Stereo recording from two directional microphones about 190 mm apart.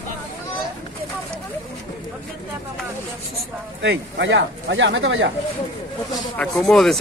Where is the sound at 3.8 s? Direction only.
65° right (ahead or behind); by 5.2 s 85° right.